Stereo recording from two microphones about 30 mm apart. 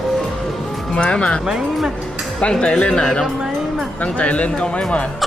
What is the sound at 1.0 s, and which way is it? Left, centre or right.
Speech, left.